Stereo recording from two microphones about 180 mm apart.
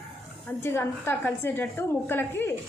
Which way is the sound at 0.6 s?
15° left (ahead or behind).